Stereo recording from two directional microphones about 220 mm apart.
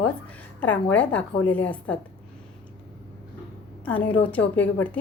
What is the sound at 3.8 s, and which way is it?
A woman's voice, 5° left (ahead or behind).